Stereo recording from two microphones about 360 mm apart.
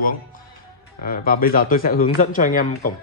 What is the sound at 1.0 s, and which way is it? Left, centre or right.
A man's voice, left.